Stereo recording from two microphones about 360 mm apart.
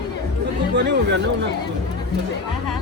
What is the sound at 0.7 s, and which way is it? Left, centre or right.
Speech, right.